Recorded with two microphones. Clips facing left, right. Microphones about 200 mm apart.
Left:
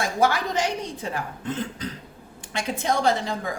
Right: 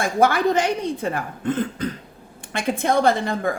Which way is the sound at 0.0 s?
55° right (ahead or behind).